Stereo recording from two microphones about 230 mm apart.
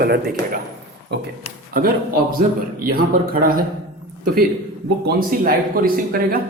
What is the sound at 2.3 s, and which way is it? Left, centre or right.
Speech, right.